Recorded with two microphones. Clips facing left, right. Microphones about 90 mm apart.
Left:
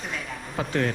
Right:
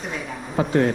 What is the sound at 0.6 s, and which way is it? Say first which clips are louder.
Speech: right 7 dB; 35° right (ahead or behind).